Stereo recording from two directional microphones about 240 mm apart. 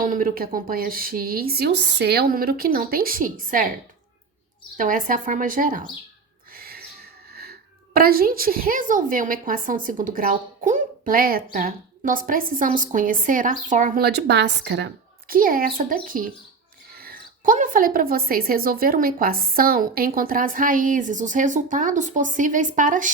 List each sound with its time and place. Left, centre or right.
0.0 s a woman's voice: right
4.8 s a woman's voice: right
6.5 s a sound: right
7.9 s a woman's voice: right
15.3 s a woman's voice: right